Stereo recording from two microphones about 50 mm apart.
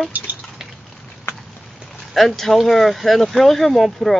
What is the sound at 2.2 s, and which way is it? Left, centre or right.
Speech, centre.